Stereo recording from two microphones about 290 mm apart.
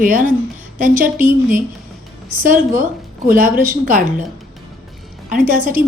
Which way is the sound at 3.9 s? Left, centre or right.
Right.